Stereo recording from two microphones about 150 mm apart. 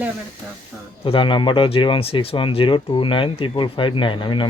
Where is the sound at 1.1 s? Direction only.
35° left (ahead or behind).